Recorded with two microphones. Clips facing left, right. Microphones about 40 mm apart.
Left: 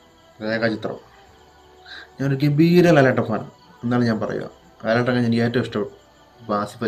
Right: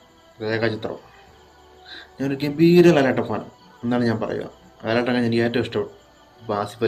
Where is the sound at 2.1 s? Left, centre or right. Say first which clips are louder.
Left 3 dB; centre.